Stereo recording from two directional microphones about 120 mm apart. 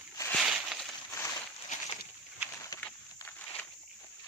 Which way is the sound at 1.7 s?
90° left.